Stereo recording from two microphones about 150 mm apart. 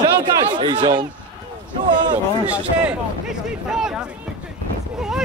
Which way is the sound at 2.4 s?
10° right (ahead or behind).